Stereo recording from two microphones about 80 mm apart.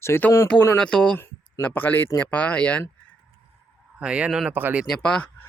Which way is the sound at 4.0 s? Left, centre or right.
Centre.